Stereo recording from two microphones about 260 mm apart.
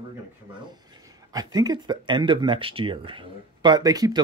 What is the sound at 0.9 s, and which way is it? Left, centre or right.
Speech, centre.